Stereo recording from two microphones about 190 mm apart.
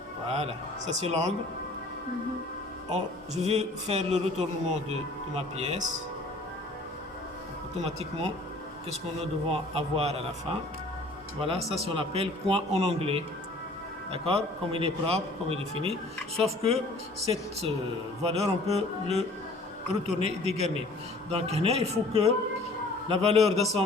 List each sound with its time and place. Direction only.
0.3 s a man's voice: 35° right (ahead or behind)
2.9 s a man's voice: 35° right (ahead or behind)
7.8 s a man's voice: 35° right (ahead or behind)
9.5 s a man's voice: 30° right (ahead or behind)
11.3 s a man's voice: 30° right (ahead or behind)